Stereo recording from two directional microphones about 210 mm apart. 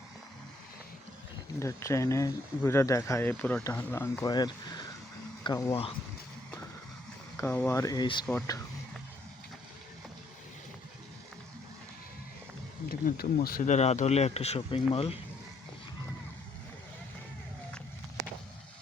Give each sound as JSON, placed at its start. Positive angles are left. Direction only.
{"t": 1.5, "sound": "speech", "side_deg": 15}
{"t": 7.3, "sound": "speech", "side_deg": 10}
{"t": 8.3, "sound": "speech", "side_deg": 5}
{"t": 12.9, "sound": "speech", "side_deg": 45}